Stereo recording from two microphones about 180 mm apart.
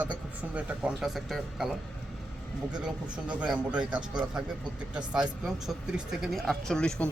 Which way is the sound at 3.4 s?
5° right (ahead or behind).